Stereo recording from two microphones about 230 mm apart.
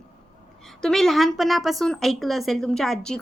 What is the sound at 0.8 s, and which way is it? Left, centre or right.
A woman's voice, centre.